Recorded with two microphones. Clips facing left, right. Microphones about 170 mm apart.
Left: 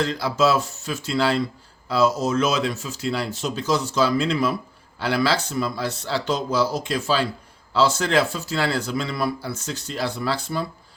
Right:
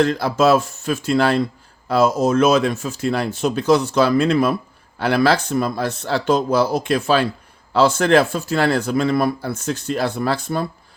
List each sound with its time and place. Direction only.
0.0 s speech: 55° right (ahead or behind)